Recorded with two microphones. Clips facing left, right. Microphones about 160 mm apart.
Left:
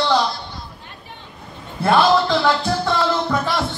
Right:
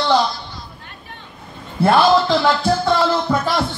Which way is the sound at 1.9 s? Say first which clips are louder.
Right 1 dB; centre (ahead or behind).